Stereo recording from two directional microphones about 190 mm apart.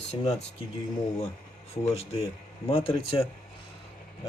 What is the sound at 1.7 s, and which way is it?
Speech, 30° left (ahead or behind).